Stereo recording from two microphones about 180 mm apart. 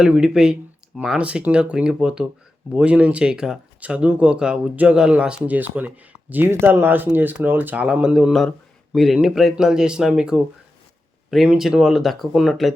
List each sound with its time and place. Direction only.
0.0 s speech: 5° right (ahead or behind)